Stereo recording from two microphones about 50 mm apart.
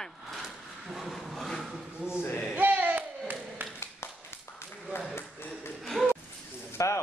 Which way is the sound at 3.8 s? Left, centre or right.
Left.